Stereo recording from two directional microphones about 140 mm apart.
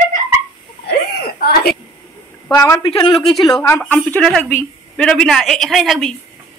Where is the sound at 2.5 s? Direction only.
20° left (ahead or behind).